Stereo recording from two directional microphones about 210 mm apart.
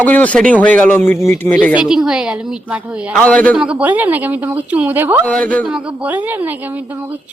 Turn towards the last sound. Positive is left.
turn(degrees=-10)  # may be behind; listen again after turning